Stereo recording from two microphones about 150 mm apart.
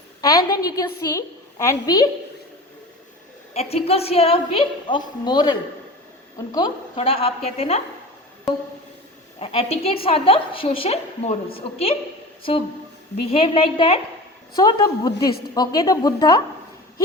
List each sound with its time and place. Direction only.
0.2 s a woman's voice: 25° left (ahead or behind)
3.5 s a woman's voice: 45° left (ahead or behind); by 6.7 s 25° left (ahead or behind)
6.9 s a woman's voice: 40° left (ahead or behind)
9.4 s a woman's voice: 40° left (ahead or behind)
14.5 s a woman's voice: 25° left (ahead or behind)